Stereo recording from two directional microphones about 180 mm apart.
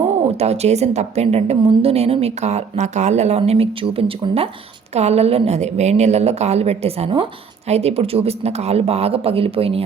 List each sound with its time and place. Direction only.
0.3 s a woman's voice: 35° right (ahead or behind)